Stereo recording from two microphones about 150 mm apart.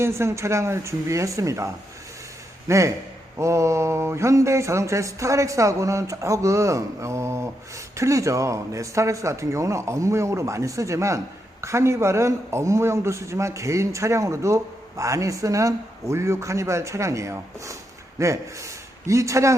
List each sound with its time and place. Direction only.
0.0 s a man's voice: 20° right (ahead or behind)